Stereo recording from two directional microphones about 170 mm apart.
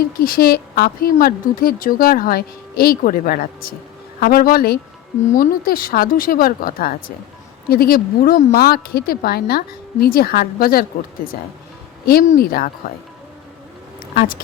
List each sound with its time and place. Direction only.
0.0 s a woman's voice: 60° left (ahead or behind)
12.4 s a woman's voice: 60° left (ahead or behind)
14.2 s a woman's voice: 60° left (ahead or behind)